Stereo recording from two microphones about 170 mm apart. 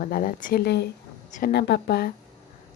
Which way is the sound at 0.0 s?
55° left (ahead or behind).